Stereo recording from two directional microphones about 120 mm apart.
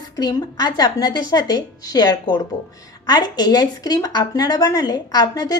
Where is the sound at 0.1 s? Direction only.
30° left (ahead or behind).